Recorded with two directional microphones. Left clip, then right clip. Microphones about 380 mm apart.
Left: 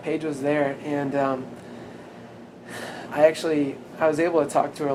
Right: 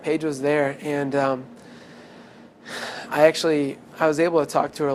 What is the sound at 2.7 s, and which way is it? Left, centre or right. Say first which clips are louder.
A man's voice: right 4 dB; right.